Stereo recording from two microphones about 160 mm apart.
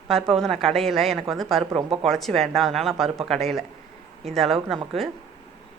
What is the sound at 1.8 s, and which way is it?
Speech, 35° right (ahead or behind).